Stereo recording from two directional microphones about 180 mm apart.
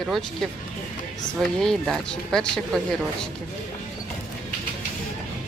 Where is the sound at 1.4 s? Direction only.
Centre (ahead or behind).